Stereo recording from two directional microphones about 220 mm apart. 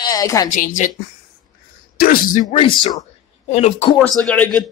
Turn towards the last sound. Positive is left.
turn(degrees=5)  # may be behind; listen again after turning